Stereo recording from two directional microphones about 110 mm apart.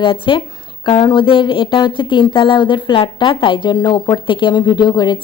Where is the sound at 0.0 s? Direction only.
50° left (ahead or behind).